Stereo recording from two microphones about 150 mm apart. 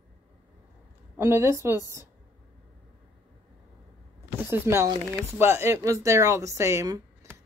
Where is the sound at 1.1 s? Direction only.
15° right (ahead or behind).